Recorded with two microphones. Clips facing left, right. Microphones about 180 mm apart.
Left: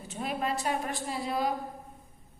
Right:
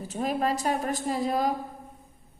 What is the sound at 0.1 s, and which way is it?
A woman's voice, 40° right (ahead or behind).